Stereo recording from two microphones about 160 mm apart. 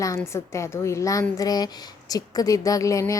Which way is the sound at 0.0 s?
20° left (ahead or behind).